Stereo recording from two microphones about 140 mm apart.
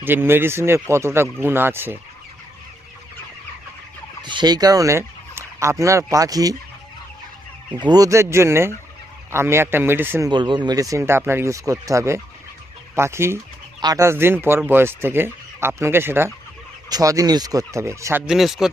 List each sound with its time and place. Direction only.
0.0 s speech: 15° right (ahead or behind)
4.2 s speech: 35° right (ahead or behind)
7.8 s speech: 30° right (ahead or behind)
10.2 s speech: 35° right (ahead or behind)
18.3 s speech: centre (ahead or behind)